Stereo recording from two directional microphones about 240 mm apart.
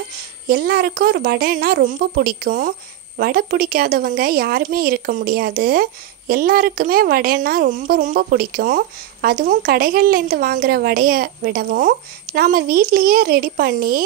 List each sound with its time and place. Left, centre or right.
0.5 s a woman's voice: right